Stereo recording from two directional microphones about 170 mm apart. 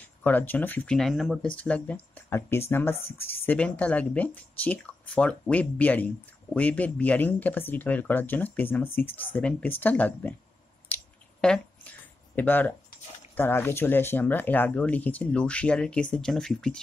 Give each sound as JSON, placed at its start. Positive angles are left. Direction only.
{"t": 0.0, "sound": "speech", "side_deg": 10}
{"t": 3.0, "sound": "speech", "side_deg": 35}
{"t": 3.4, "sound": "speech", "side_deg": 10}
{"t": 10.9, "sound": "a sound", "side_deg": 10}
{"t": 12.4, "sound": "speech", "side_deg": 10}